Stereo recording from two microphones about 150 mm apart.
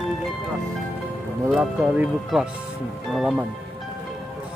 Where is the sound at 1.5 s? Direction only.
10° right (ahead or behind).